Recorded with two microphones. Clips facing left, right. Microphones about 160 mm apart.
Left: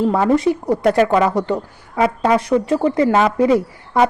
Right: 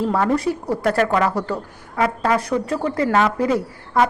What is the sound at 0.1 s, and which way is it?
Speech, 20° left (ahead or behind).